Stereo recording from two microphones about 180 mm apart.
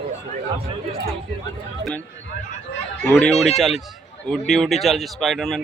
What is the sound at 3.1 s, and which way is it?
Speech, 10° left (ahead or behind).